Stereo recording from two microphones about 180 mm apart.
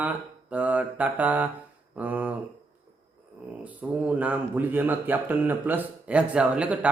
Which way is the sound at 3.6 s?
10° right (ahead or behind).